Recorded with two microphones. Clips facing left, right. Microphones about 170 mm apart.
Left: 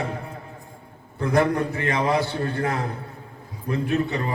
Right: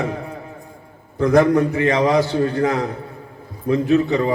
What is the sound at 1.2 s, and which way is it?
A man's voice, 70° right (ahead or behind).